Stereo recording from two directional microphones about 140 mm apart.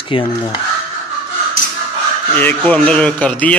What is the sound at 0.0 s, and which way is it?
Speech, 40° left (ahead or behind).